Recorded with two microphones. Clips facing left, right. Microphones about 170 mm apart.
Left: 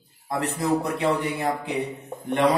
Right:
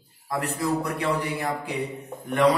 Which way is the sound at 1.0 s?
25° left (ahead or behind).